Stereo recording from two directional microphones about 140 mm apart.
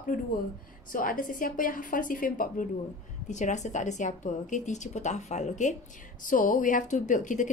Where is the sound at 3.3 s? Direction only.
60° left (ahead or behind).